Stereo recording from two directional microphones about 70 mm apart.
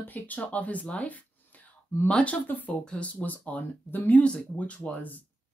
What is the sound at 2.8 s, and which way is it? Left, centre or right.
Speech, centre.